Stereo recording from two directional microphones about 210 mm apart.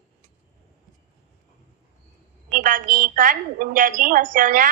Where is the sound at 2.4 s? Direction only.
40° right (ahead or behind).